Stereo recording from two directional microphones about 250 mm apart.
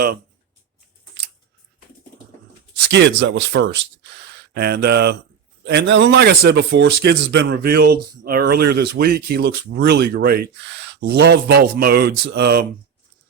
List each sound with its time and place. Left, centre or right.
2.7 s speech: right